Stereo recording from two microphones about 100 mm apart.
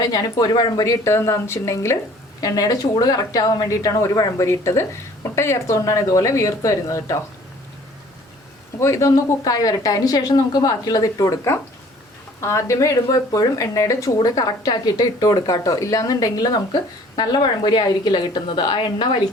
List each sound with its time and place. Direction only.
0.0 s speech: 40° left (ahead or behind)
1.0 s speech: 30° left (ahead or behind)
2.4 s speech: 40° left (ahead or behind)
8.8 s speech: 30° left (ahead or behind)
17.2 s a woman's voice: 50° left (ahead or behind)